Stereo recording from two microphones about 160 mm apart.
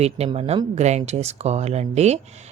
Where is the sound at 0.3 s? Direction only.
40° right (ahead or behind).